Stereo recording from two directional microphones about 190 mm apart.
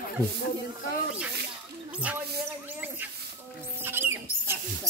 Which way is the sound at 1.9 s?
5° right (ahead or behind).